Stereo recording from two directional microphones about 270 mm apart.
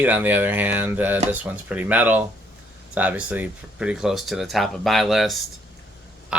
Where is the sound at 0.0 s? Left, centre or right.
Centre.